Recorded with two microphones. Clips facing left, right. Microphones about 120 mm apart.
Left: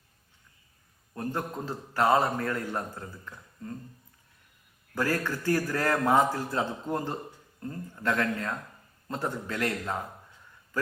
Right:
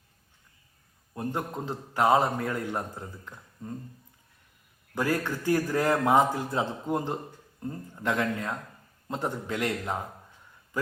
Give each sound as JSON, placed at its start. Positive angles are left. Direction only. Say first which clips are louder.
{"t": 1.1, "sound": "a man's voice", "louder": "right 1 dB", "side_deg": -15}
{"t": 4.9, "sound": "a man's voice", "louder": "right 1 dB", "side_deg": -15}